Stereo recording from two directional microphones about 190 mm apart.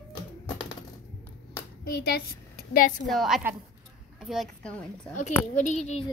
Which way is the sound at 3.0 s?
Centre (ahead or behind).